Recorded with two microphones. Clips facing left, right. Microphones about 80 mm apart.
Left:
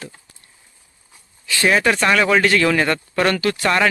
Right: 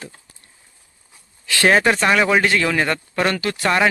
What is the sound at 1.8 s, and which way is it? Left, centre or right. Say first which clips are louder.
Speech: even; centre.